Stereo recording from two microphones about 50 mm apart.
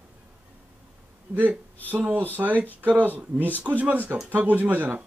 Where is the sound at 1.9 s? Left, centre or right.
Right.